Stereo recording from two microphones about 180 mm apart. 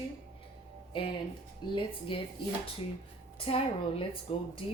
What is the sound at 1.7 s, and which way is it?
Speech, 30° left (ahead or behind).